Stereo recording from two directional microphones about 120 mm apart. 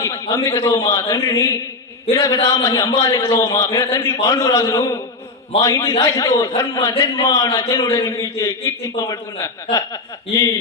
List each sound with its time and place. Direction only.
0.0 s a man's voice: 30° left (ahead or behind)